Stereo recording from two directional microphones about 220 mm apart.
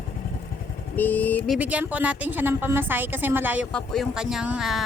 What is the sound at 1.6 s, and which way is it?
Speech, 5° right (ahead or behind).